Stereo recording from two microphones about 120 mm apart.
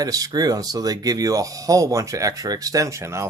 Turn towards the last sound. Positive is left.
turn(degrees=-25)  # may be behind; listen again after turning